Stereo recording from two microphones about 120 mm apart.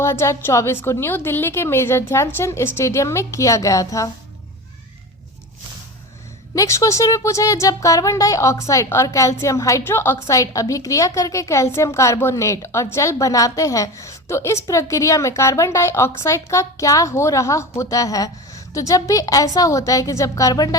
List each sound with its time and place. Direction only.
0.0 s speech: 20° left (ahead or behind)
6.5 s speech: 25° left (ahead or behind)